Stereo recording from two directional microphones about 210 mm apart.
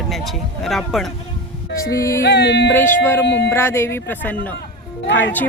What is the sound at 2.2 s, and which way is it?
Speech, 55° left (ahead or behind).